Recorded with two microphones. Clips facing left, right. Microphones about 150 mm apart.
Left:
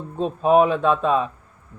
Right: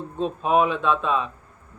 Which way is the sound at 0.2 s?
40° left (ahead or behind).